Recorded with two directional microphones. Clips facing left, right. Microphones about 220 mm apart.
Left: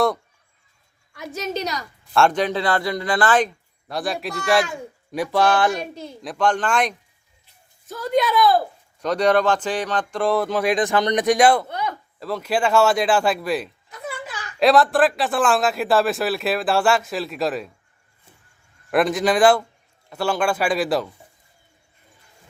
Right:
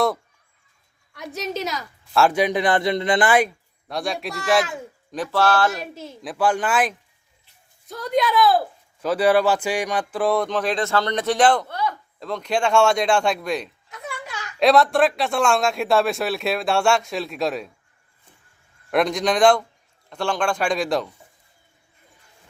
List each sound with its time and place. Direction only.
1.1 s a woman's voice: centre (ahead or behind)
3.8 s speech: centre (ahead or behind)
5.1 s speech: 15° left (ahead or behind)
5.7 s speech: 5° right (ahead or behind); by 11.9 s 20° left (ahead or behind)
12.2 s speech: 5° left (ahead or behind)
18.9 s speech: 5° left (ahead or behind)